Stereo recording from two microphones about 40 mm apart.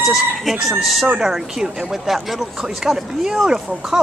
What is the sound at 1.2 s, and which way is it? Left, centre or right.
Speech, centre.